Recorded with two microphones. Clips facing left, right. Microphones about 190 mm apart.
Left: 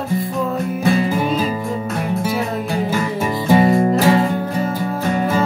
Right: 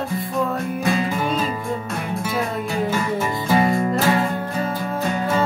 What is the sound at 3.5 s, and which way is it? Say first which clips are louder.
Music: left 6 dB; 25° left (ahead or behind).